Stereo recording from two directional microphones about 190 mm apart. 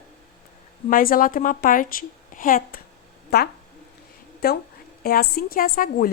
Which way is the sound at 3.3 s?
60° left (ahead or behind).